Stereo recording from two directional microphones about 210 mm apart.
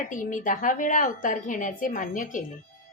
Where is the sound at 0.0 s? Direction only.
40° left (ahead or behind).